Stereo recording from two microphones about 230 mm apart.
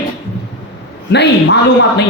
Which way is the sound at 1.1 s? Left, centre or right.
Left.